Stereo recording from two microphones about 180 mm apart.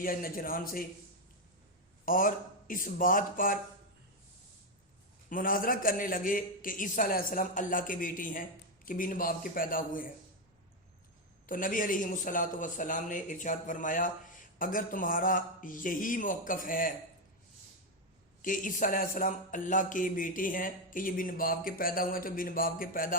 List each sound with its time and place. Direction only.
0.0 s a man's voice: 50° left (ahead or behind)
2.0 s a man's voice: 50° left (ahead or behind)
5.3 s a man's voice: 50° left (ahead or behind)
11.4 s a man's voice: 50° left (ahead or behind)
18.4 s a man's voice: 45° left (ahead or behind)